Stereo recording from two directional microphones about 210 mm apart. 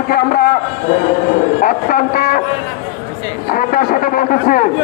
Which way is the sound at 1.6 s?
40° left (ahead or behind).